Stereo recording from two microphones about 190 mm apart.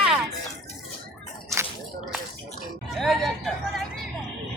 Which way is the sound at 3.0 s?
Centre (ahead or behind).